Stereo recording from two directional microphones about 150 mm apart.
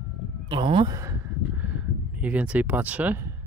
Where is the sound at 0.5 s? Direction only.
35° right (ahead or behind).